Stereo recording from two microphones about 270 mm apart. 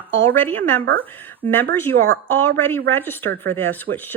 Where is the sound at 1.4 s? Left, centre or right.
Right.